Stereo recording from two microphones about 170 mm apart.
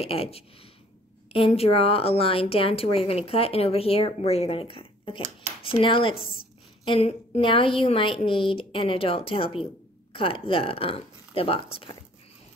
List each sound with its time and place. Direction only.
0.0 s a woman's voice: 35° left (ahead or behind)